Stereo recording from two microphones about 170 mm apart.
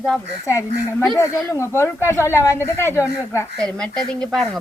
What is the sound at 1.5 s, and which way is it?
Speech, 15° left (ahead or behind).